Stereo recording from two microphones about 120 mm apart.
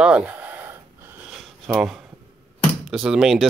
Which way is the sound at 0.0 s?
10° right (ahead or behind).